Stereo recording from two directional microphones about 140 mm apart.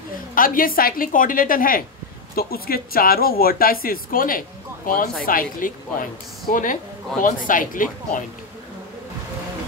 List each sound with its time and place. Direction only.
0.3 s a woman's voice: 85° left